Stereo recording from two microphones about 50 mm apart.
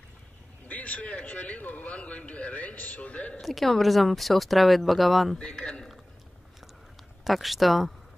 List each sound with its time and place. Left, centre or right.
0.7 s a man's voice: left
3.3 s speech: centre
5.4 s a man's voice: centre
7.2 s speech: centre